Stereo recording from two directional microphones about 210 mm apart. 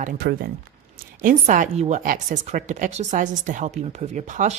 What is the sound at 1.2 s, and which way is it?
Speech, 35° right (ahead or behind).